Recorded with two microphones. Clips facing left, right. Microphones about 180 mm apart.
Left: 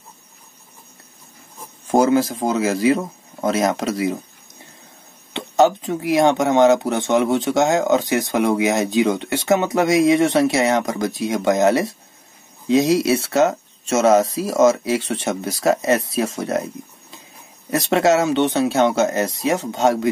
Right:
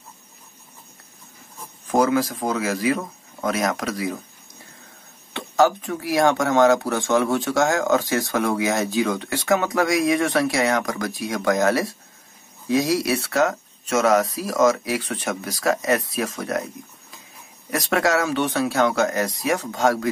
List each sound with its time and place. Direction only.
1.9 s speech: 25° left (ahead or behind)
5.3 s speech: 20° left (ahead or behind)
17.6 s speech: 25° left (ahead or behind)